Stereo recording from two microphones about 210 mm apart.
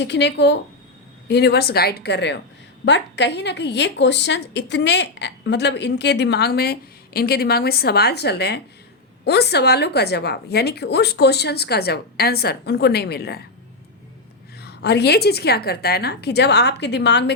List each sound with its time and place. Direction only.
0.0 s a woman's voice: 55° left (ahead or behind)
14.6 s a woman's voice: 50° left (ahead or behind)